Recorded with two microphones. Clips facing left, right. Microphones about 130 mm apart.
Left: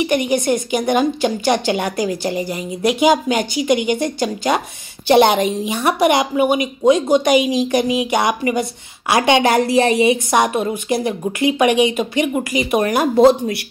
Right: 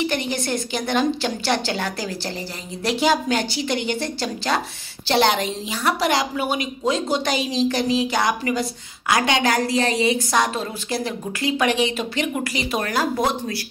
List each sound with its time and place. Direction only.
0.0 s a woman's voice: 15° left (ahead or behind)